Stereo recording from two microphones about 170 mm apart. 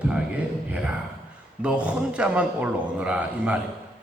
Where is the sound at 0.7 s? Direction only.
5° right (ahead or behind).